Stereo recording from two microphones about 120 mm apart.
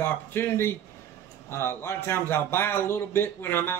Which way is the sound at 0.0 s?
20° left (ahead or behind).